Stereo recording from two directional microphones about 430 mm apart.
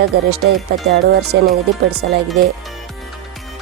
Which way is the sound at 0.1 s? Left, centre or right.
Right.